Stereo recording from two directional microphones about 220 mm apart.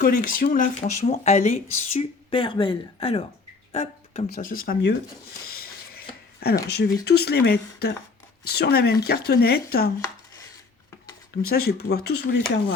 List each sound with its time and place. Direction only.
0.0 s speech: 40° left (ahead or behind)
5.5 s a sound: 45° left (ahead or behind)
6.7 s speech: 50° left (ahead or behind)
11.4 s speech: 45° left (ahead or behind)